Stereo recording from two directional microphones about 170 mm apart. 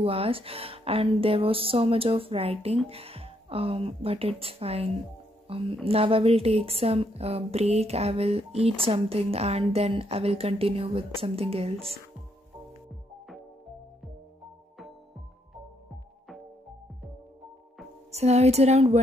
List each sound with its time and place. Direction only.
0.0 s a woman's voice: 35° right (ahead or behind)
18.1 s a woman's voice: 40° right (ahead or behind)